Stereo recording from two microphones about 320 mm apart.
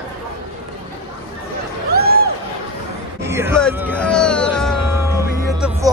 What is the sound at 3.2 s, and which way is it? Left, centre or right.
Speech, centre.